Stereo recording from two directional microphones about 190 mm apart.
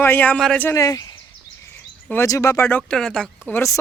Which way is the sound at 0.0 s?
10° left (ahead or behind).